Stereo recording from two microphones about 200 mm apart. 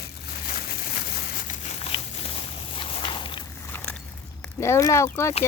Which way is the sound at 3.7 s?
5° left (ahead or behind).